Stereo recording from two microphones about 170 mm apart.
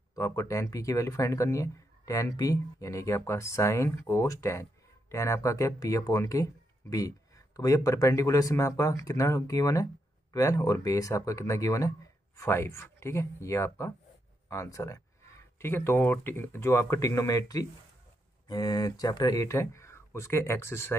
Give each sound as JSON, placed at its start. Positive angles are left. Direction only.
{"t": 0.1, "sound": "speech", "side_deg": 20}